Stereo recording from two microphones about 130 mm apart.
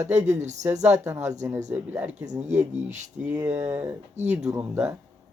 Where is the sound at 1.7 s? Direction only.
15° right (ahead or behind).